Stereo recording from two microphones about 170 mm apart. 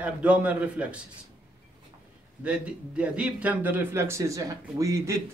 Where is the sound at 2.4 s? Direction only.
5° right (ahead or behind).